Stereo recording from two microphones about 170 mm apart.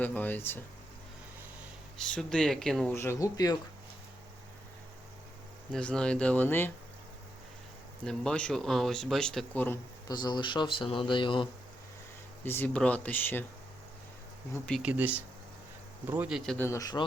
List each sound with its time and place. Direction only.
0.0 s speech: 10° left (ahead or behind)
2.0 s speech: 5° left (ahead or behind)
2.9 s speech: 15° left (ahead or behind)
5.7 s speech: 5° left (ahead or behind)
8.0 s speech: 5° left (ahead or behind)
10.1 s speech: 25° left (ahead or behind)
12.5 s speech: 10° left (ahead or behind)
14.7 s speech: 5° right (ahead or behind)
16.5 s speech: 15° left (ahead or behind)